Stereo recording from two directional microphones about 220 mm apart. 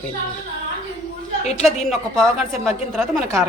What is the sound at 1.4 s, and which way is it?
Speech, 30° left (ahead or behind).